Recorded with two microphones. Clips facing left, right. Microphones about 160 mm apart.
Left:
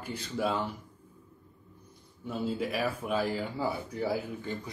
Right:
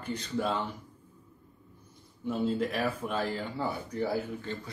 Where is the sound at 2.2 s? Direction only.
Centre (ahead or behind).